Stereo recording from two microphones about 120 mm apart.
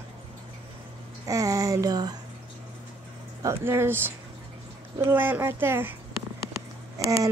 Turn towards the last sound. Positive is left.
turn(degrees=-30)  # may be behind; listen again after turning